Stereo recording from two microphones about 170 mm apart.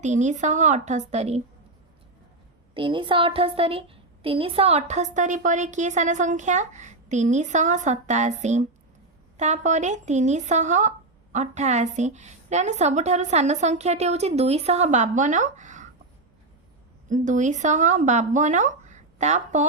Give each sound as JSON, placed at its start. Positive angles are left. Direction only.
{"t": 0.0, "sound": "speech", "side_deg": -45}
{"t": 2.7, "sound": "speech", "side_deg": -30}
{"t": 17.1, "sound": "speech", "side_deg": -45}